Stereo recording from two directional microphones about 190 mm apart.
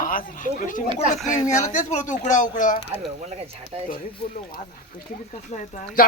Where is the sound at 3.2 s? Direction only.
35° right (ahead or behind).